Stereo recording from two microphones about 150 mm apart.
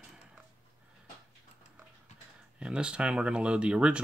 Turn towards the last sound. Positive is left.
turn(degrees=-5)  # may be behind; listen again after turning